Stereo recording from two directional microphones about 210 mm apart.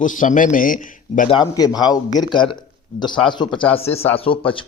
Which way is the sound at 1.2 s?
20° left (ahead or behind).